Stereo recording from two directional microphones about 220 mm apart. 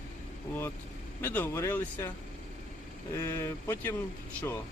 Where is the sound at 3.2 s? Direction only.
10° left (ahead or behind).